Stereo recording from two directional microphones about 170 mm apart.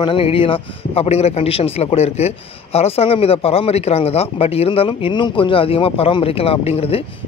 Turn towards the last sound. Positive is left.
turn(degrees=35)  # may be behind; listen again after turning